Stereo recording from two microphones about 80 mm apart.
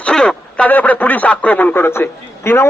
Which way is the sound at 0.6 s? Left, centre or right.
Left.